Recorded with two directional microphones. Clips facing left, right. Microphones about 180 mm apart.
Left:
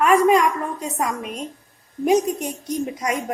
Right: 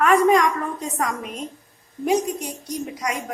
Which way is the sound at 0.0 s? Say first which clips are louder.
Left 1 dB; 10° left (ahead or behind).